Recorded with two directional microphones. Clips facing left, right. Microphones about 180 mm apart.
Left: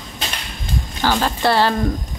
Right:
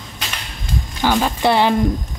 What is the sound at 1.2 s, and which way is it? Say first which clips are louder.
Speech: even; 15° right (ahead or behind).